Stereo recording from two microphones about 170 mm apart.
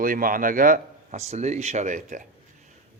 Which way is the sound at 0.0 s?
55° right (ahead or behind).